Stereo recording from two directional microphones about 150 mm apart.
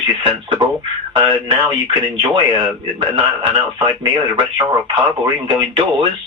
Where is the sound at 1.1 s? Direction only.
30° right (ahead or behind).